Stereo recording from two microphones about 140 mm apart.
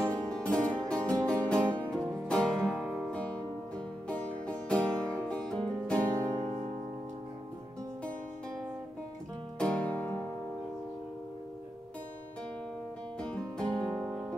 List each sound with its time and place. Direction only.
0.0 s music: 10° left (ahead or behind)
3.1 s music: 10° left (ahead or behind)
9.6 s music: 10° left (ahead or behind)
13.2 s music: 5° left (ahead or behind)